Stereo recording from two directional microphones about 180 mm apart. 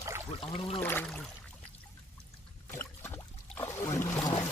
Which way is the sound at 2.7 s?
15° left (ahead or behind).